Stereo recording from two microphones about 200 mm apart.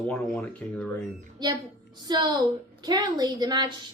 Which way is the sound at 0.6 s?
5° left (ahead or behind).